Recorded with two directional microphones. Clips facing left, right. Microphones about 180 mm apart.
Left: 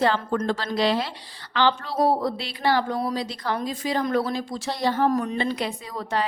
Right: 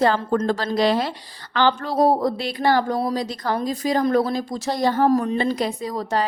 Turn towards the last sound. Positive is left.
turn(degrees=-40)  # may be behind; listen again after turning